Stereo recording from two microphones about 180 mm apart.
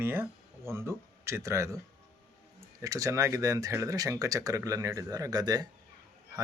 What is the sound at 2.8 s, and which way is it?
Speech, 20° right (ahead or behind).